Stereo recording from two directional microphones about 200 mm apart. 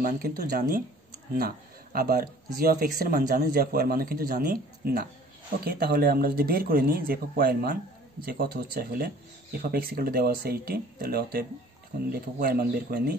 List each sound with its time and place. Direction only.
0.0 s speech: 45° right (ahead or behind)